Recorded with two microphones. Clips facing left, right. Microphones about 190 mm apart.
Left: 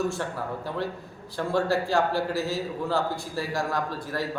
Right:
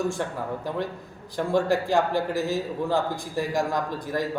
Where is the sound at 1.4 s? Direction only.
15° right (ahead or behind).